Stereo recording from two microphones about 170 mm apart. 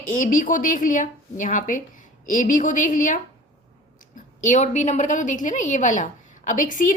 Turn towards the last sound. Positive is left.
turn(degrees=50)  # may be behind; listen again after turning